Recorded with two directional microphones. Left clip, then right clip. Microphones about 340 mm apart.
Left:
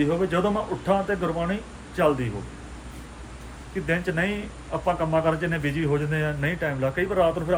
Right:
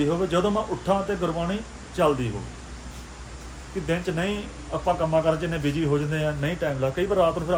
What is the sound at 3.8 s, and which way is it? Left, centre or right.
A man's voice, centre.